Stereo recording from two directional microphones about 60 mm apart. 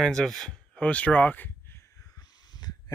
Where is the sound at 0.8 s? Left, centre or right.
Left.